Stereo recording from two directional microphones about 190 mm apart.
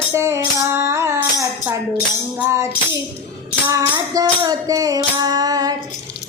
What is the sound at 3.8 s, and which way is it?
Music, 20° right (ahead or behind).